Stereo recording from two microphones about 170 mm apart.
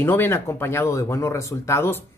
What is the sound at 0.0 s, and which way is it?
Speech, 15° left (ahead or behind).